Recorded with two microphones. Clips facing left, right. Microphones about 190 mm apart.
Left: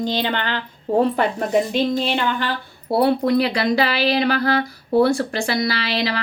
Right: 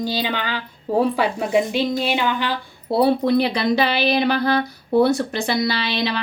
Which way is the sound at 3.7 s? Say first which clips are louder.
Even; 20° right (ahead or behind).